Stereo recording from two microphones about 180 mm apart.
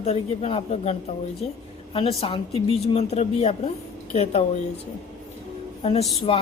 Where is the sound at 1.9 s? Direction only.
30° left (ahead or behind).